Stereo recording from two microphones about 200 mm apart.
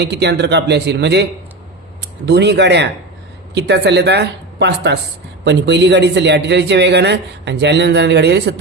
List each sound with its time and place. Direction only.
0.0 s a man's voice: 55° right (ahead or behind)